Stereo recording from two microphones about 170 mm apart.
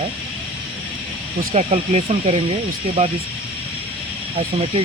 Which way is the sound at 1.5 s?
40° right (ahead or behind).